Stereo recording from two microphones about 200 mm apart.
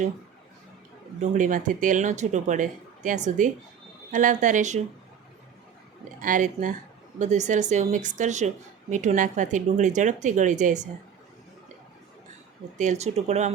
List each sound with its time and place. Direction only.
1.2 s a woman's voice: 40° right (ahead or behind)
6.1 s a woman's voice: 40° right (ahead or behind)
12.7 s a woman's voice: 35° right (ahead or behind)